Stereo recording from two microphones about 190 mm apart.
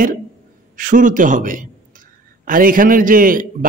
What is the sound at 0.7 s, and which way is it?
A man's voice, 45° right (ahead or behind).